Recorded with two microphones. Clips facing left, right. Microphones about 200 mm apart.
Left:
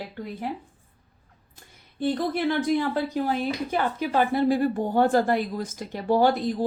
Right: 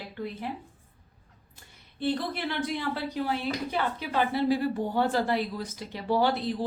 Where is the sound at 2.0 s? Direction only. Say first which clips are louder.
Left 5 dB; 45° left (ahead or behind).